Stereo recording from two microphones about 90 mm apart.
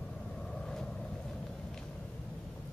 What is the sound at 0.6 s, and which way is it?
Vehicle, 5° left (ahead or behind).